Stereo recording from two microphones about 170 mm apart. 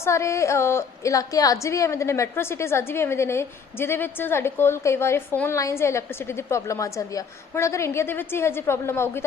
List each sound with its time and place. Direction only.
0.0 s a woman's voice: 15° left (ahead or behind)